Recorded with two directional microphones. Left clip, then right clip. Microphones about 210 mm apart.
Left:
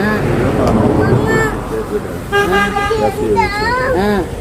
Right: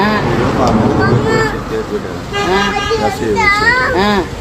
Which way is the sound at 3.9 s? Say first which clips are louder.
Right 2 dB; 5° left (ahead or behind).